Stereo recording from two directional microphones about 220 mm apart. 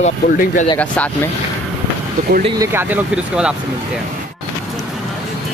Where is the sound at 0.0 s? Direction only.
35° left (ahead or behind).